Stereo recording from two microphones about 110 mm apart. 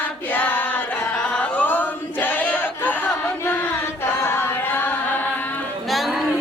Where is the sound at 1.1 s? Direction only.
10° left (ahead or behind).